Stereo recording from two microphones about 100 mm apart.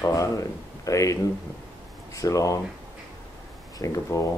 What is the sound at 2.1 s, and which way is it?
Speech, 35° left (ahead or behind).